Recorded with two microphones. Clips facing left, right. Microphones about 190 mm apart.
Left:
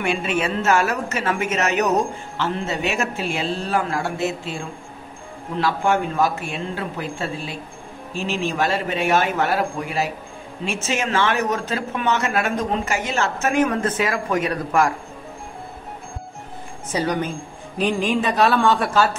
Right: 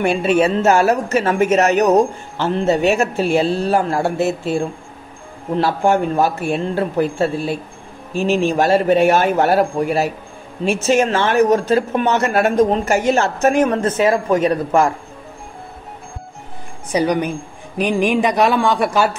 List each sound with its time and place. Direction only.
0.0 s speech: 40° right (ahead or behind)
8.3 s a man's voice: 40° right (ahead or behind)
10.8 s a man's voice: 40° right (ahead or behind)
13.4 s speech: 35° right (ahead or behind)
16.9 s speech: 15° right (ahead or behind)